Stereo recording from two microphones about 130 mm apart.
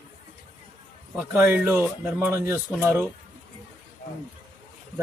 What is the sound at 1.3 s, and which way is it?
Speech, 15° right (ahead or behind).